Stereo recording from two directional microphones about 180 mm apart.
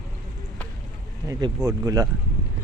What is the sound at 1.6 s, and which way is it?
Speech, 20° right (ahead or behind).